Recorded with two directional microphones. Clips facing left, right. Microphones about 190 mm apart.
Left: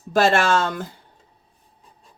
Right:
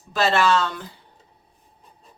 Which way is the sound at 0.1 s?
50° left (ahead or behind).